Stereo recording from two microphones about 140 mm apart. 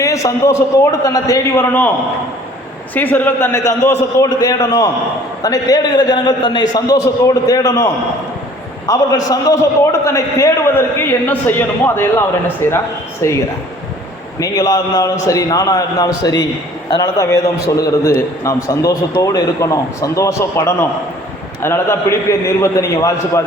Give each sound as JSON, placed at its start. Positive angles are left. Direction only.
{"t": 0.0, "sound": "a man's voice", "side_deg": 20}
{"t": 2.9, "sound": "a man's voice", "side_deg": 10}
{"t": 8.9, "sound": "a man's voice", "side_deg": 25}
{"t": 18.4, "sound": "a man's voice", "side_deg": 25}